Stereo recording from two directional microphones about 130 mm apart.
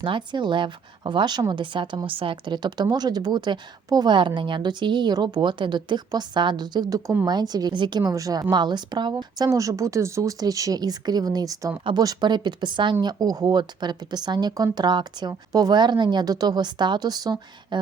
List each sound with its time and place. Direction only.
0.0 s speech: 40° right (ahead or behind)